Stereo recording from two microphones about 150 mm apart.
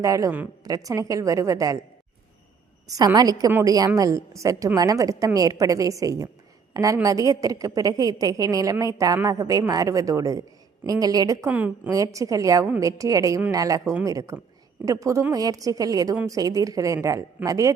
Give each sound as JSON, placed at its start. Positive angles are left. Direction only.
{"t": 0.0, "sound": "speech", "side_deg": -20}
{"t": 2.8, "sound": "speech", "side_deg": -25}
{"t": 11.4, "sound": "a woman's voice", "side_deg": -10}
{"t": 11.9, "sound": "speech", "side_deg": -25}